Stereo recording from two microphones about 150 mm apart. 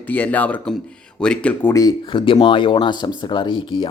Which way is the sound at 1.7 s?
25° left (ahead or behind).